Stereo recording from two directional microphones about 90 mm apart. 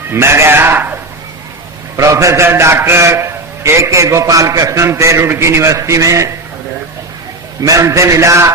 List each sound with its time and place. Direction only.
0.1 s speech: 30° right (ahead or behind)
2.0 s a man's voice: 35° right (ahead or behind)
7.6 s a man's voice: 35° right (ahead or behind)